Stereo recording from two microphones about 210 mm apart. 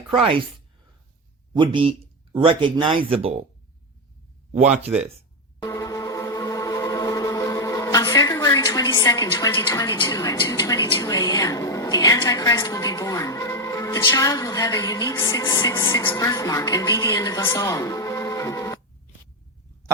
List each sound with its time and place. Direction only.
0.2 s speech: 25° right (ahead or behind)
1.5 s speech: 25° right (ahead or behind)
5.6 s a sound: 15° left (ahead or behind)
15.9 s a woman's voice: 15° left (ahead or behind)